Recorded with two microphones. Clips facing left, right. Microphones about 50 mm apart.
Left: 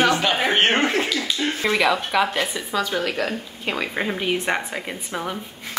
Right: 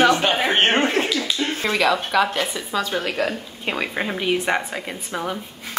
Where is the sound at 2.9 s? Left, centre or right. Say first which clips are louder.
Right 1 dB; centre.